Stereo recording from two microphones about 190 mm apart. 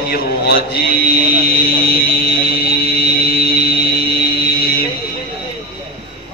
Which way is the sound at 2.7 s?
55° left (ahead or behind).